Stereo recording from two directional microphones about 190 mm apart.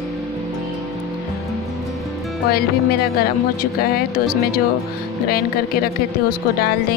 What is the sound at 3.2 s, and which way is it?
Speech, 50° left (ahead or behind).